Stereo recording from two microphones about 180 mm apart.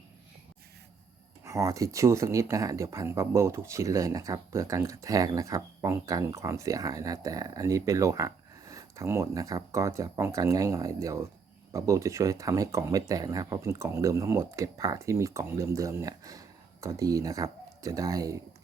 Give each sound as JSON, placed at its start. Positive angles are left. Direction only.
{"t": 1.5, "sound": "speech", "side_deg": -15}